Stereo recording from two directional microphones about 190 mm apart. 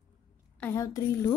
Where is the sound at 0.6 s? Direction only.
15° left (ahead or behind).